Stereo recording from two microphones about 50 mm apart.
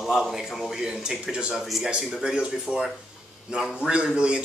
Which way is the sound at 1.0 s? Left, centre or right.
Centre.